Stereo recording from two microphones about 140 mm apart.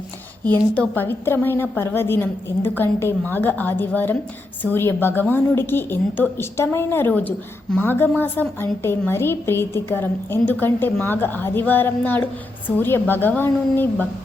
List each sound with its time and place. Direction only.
0.4 s a woman's voice: 10° left (ahead or behind)